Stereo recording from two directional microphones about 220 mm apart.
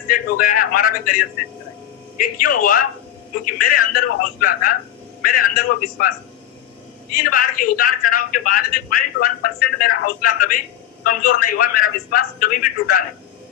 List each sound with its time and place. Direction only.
0.1 s speech: 40° left (ahead or behind)
7.2 s speech: 40° left (ahead or behind)